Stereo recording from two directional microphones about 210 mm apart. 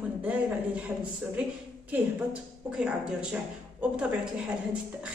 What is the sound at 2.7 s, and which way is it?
A woman's voice, 5° right (ahead or behind).